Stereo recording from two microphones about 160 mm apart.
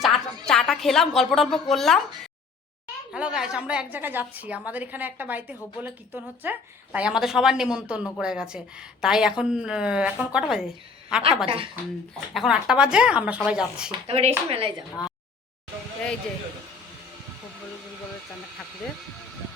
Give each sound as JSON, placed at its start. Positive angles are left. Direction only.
{"t": 0.0, "sound": "music", "side_deg": 5}
{"t": 3.1, "sound": "a woman's voice", "side_deg": -5}
{"t": 11.4, "sound": "speech", "side_deg": -35}
{"t": 12.3, "sound": "a woman's voice", "side_deg": 0}
{"t": 14.1, "sound": "speech", "side_deg": -40}